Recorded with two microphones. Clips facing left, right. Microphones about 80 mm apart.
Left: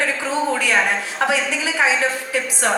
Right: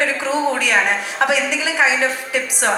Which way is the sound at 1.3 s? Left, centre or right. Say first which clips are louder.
Right 2 dB; right.